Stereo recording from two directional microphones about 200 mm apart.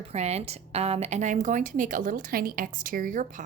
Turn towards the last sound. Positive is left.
turn(degrees=-40)  # may be behind; listen again after turning